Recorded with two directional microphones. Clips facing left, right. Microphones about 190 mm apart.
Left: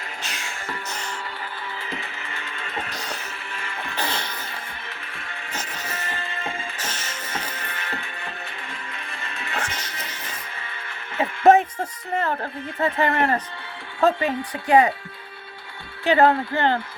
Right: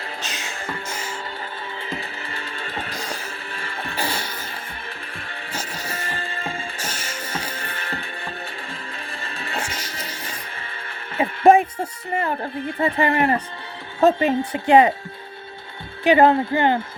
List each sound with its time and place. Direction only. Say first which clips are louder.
0.2 s music: right 2 dB; 20° right (ahead or behind)
0.9 s music: right 2 dB; 5° right (ahead or behind)
1.9 s music: right 3 dB; 35° right (ahead or behind)
3.9 s music: right 1 dB; 10° right (ahead or behind)
5.1 s music: right 1 dB; 30° right (ahead or behind)
6.7 s music: right 2 dB; 10° right (ahead or behind)
7.3 s music: right 1 dB; 30° right (ahead or behind)
11.4 s speech: right 1 dB; 10° right (ahead or behind)
14.0 s speech: right 4 dB; 25° right (ahead or behind)
16.0 s speech: right 3 dB; 20° right (ahead or behind)